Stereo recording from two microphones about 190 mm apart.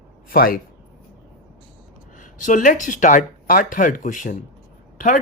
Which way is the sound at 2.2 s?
45° left (ahead or behind).